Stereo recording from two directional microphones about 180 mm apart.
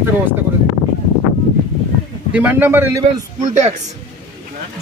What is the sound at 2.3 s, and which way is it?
Speech, 10° right (ahead or behind).